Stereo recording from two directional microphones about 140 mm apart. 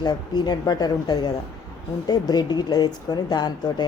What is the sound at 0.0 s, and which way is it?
Speech, 30° left (ahead or behind).